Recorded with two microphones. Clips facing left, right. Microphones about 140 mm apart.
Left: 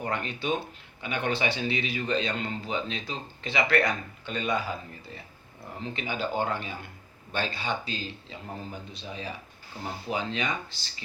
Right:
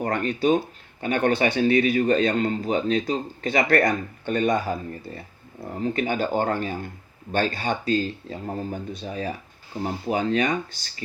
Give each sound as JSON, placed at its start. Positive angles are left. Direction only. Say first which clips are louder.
{"t": 0.0, "sound": "a man's voice", "louder": "right 9 dB", "side_deg": -45}
{"t": 5.8, "sound": "a man's voice", "louder": "right 8 dB", "side_deg": -45}